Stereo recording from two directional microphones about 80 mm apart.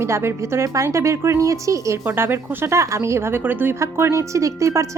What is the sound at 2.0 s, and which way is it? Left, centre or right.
Speech, right.